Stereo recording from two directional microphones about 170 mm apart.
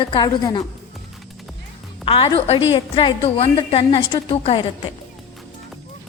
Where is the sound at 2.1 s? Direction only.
30° left (ahead or behind).